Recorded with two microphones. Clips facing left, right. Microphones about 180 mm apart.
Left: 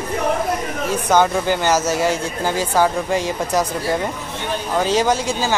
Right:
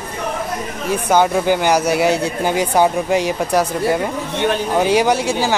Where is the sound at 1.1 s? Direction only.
15° right (ahead or behind).